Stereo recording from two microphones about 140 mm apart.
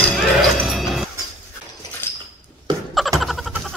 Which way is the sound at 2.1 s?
15° left (ahead or behind).